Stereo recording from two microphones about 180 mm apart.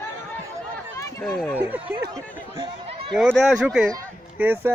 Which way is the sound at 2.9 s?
35° right (ahead or behind).